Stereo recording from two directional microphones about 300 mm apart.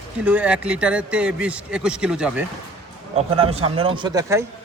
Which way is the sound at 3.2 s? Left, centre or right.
Centre.